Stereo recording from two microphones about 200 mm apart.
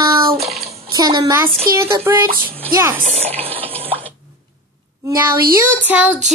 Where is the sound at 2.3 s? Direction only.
45° right (ahead or behind).